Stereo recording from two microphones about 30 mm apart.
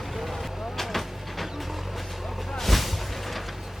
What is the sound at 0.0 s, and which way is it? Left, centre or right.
Vehicle, centre.